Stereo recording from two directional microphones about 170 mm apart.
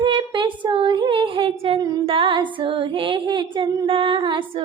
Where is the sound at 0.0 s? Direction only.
30° right (ahead or behind).